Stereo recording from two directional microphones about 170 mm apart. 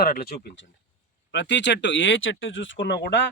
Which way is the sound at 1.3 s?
90° left.